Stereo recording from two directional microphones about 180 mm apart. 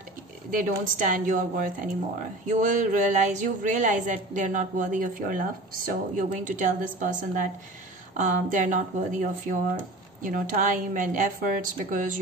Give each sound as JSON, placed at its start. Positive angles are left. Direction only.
{"t": 0.5, "sound": "speech", "side_deg": -45}